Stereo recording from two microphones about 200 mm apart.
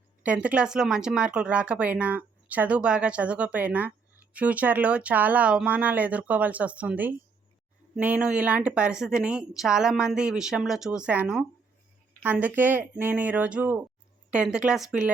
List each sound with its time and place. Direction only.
0.2 s a woman's voice: 5° right (ahead or behind)